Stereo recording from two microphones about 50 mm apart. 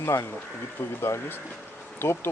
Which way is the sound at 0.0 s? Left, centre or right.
Left.